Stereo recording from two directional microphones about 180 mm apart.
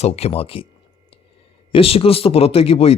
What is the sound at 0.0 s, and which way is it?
Speech, 35° left (ahead or behind).